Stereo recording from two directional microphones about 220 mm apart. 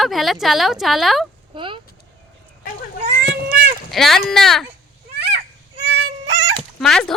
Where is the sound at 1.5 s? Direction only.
20° right (ahead or behind).